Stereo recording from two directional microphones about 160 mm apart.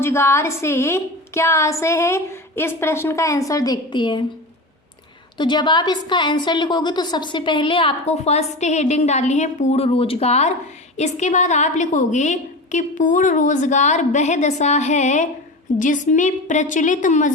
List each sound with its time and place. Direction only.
0.0 s a woman's voice: 15° left (ahead or behind)
5.4 s a woman's voice: 30° left (ahead or behind); by 17.3 s 50° left (ahead or behind)